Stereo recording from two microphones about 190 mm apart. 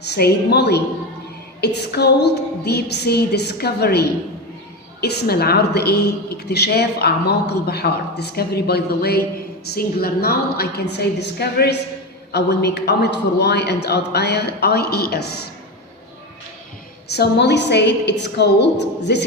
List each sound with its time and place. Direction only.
0.1 s a woman's voice: 60° left (ahead or behind)
17.1 s a woman's voice: 60° left (ahead or behind)